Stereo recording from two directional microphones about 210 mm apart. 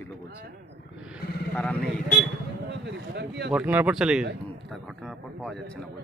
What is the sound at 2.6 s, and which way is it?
Speech, 55° right (ahead or behind).